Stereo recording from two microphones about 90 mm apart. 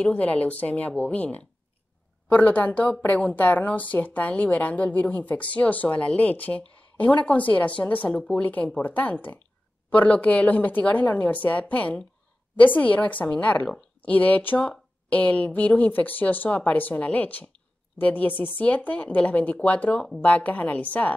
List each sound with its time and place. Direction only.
0.0 s a woman's voice: 15° left (ahead or behind)